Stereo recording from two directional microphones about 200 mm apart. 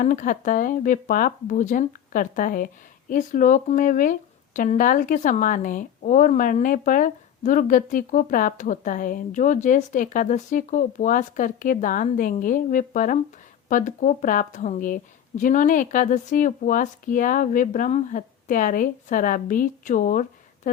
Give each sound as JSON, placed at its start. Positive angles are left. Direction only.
{"t": 0.0, "sound": "speech", "side_deg": 40}